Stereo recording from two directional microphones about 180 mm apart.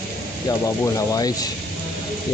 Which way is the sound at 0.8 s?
20° left (ahead or behind).